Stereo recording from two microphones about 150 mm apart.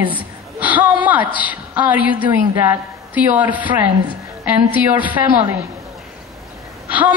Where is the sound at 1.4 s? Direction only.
10° right (ahead or behind).